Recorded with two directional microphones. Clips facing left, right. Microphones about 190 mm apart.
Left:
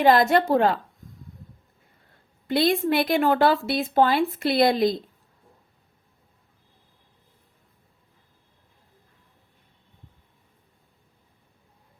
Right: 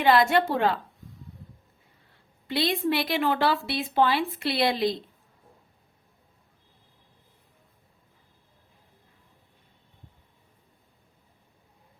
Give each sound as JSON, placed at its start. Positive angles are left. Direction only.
{"t": 0.0, "sound": "speech", "side_deg": 40}
{"t": 2.5, "sound": "speech", "side_deg": 50}